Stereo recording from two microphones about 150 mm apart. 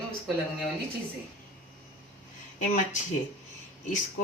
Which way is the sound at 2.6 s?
55° left (ahead or behind).